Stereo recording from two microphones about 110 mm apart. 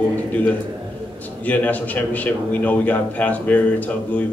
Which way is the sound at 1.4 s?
15° left (ahead or behind).